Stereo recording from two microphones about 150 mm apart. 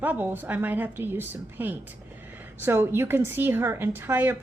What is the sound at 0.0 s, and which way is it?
A woman's voice, 10° right (ahead or behind).